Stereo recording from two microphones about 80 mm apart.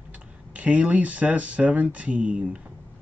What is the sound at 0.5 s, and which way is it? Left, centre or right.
Speech, centre.